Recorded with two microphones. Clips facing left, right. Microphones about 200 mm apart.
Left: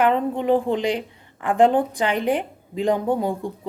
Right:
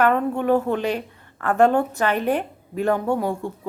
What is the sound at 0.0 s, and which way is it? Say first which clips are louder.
A woman's voice: even; 20° left (ahead or behind).